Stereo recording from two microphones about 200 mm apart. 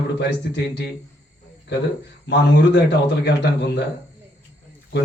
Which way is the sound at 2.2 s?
60° left (ahead or behind).